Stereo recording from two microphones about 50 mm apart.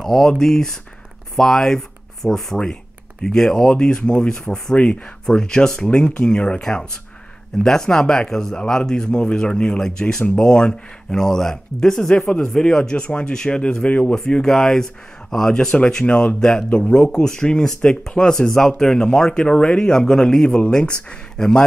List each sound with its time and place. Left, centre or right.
0.0 s speech: centre